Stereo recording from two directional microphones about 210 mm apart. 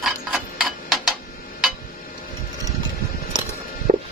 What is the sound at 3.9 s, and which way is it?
Music, 35° right (ahead or behind).